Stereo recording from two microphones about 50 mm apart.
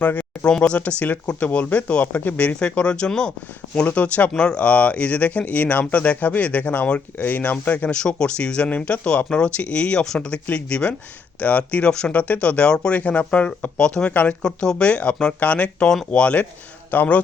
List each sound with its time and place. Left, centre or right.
0.0 s speech: left
0.4 s speech: centre
0.8 s speech: left
2.6 s speech: left
3.8 s speech: left
7.9 s speech: centre
14.1 s speech: left
14.4 s speech: centre; by 17.2 s left